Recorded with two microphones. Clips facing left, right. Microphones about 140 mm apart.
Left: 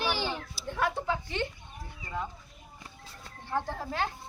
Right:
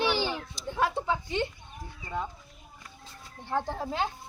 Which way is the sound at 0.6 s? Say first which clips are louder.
Right 1 dB; 5° left (ahead or behind).